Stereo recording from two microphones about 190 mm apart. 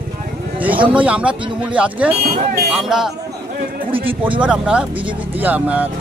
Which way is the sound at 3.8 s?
30° right (ahead or behind).